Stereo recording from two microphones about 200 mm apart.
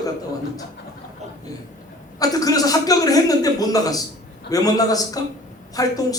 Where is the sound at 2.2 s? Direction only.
20° left (ahead or behind).